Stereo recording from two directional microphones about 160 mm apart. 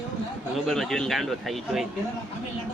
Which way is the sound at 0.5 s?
Centre (ahead or behind).